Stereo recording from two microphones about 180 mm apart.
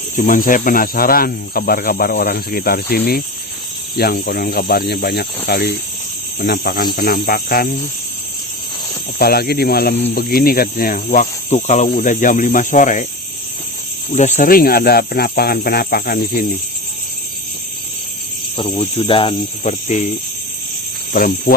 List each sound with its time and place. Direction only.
0.2 s speech: 50° left (ahead or behind)
9.1 s speech: 60° left (ahead or behind)
10.2 s cricket: 55° left (ahead or behind)
14.1 s speech: 40° left (ahead or behind)
18.5 s speech: 25° left (ahead or behind)
19.6 s cricket: 40° left (ahead or behind)
21.1 s cricket: 50° left (ahead or behind)